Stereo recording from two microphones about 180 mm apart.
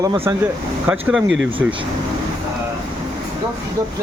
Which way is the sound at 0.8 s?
10° right (ahead or behind).